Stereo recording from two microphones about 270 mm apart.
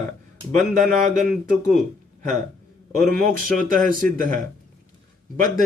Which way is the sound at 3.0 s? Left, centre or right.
Right.